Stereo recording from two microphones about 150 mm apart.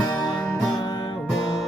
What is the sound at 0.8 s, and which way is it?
Music, 30° left (ahead or behind).